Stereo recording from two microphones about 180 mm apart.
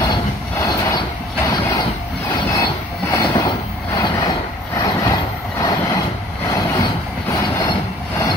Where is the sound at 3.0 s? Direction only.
20° left (ahead or behind).